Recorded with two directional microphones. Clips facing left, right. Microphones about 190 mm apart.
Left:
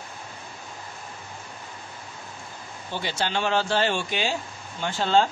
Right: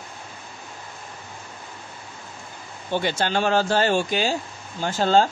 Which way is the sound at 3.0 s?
50° right (ahead or behind).